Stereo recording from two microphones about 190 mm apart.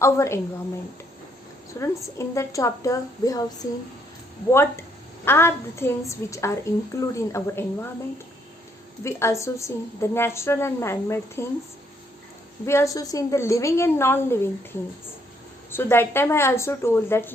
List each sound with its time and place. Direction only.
0.0 s a woman's voice: 15° left (ahead or behind)
1.8 s a woman's voice: 15° left (ahead or behind)
4.5 s a woman's voice: 15° left (ahead or behind)
9.0 s a woman's voice: 15° left (ahead or behind)
12.6 s a woman's voice: 15° left (ahead or behind)
15.7 s a woman's voice: 10° left (ahead or behind)